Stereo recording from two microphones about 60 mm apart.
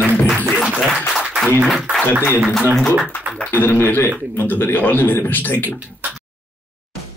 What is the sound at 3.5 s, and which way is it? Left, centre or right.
Speech, left.